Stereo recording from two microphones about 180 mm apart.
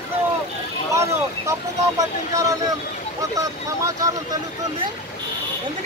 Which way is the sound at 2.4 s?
20° right (ahead or behind).